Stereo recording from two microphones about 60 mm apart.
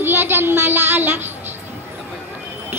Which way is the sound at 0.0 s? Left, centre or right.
Right.